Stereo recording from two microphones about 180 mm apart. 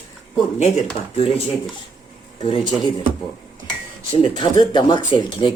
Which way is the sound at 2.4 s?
30° left (ahead or behind).